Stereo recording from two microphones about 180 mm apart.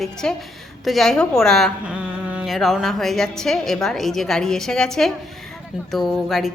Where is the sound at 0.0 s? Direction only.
5° left (ahead or behind).